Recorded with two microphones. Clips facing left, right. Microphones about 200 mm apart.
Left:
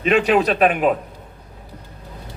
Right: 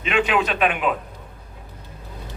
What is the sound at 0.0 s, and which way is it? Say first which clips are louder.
Speech: left 5 dB; 40° left (ahead or behind).